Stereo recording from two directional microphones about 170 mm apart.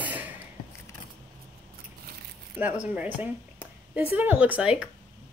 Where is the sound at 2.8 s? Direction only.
10° right (ahead or behind).